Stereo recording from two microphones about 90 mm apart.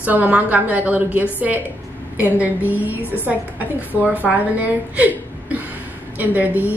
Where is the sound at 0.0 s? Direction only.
20° right (ahead or behind).